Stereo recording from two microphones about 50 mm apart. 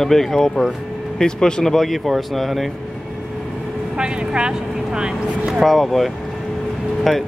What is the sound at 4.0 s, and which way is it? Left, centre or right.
Speech, centre.